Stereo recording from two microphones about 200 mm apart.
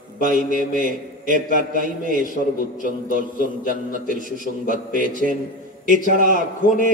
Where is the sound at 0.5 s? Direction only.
40° right (ahead or behind).